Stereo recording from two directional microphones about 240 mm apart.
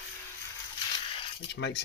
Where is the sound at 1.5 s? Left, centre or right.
Left.